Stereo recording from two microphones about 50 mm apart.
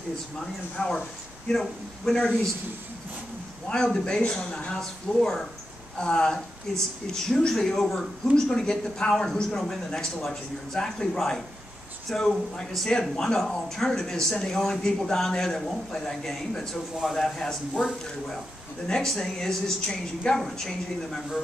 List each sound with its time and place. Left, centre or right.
0.7 s a woman's voice: centre
3.6 s a woman's voice: centre
5.2 s speech: centre
5.9 s a woman's voice: centre
18.9 s a woman's voice: centre